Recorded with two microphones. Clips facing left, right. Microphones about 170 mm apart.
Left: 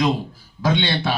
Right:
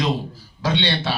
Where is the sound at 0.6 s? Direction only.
50° left (ahead or behind).